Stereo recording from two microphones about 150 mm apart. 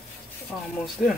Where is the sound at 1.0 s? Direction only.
5° right (ahead or behind).